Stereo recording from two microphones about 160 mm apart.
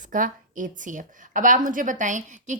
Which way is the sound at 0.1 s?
55° right (ahead or behind).